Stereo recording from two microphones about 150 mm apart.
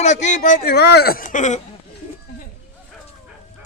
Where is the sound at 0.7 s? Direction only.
90° left; by 1.6 s 55° left (ahead or behind).